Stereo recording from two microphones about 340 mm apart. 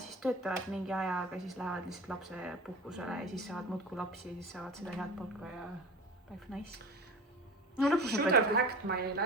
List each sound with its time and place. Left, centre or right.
0.1 s speech: centre
8.1 s a woman's voice: right